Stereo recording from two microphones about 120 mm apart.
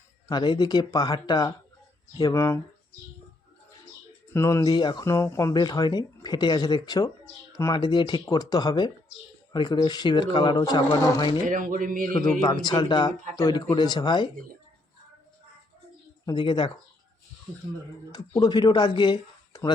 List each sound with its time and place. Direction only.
0.3 s speech: 40° left (ahead or behind)
4.4 s speech: 25° left (ahead or behind)
4.7 s speech: 40° left (ahead or behind)
5.0 s speech: 25° left (ahead or behind)
5.5 s speech: 35° left (ahead or behind)
11.4 s speech: 90° right
12.6 s speech: 40° left (ahead or behind)
16.2 s speech: 35° left (ahead or behind)
18.1 s speech: 35° left (ahead or behind)